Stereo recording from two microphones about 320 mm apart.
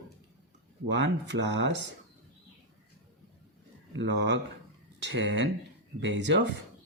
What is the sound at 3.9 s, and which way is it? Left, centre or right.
Speech, right.